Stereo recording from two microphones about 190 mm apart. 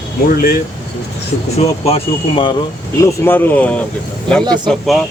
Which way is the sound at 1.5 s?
30° left (ahead or behind).